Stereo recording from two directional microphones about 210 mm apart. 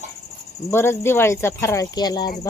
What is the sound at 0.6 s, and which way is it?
Speech, 10° left (ahead or behind).